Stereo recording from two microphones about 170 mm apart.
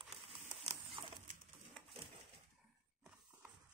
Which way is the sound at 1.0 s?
25° right (ahead or behind).